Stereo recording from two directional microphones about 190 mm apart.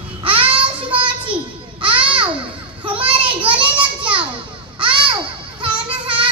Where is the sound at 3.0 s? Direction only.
30° right (ahead or behind).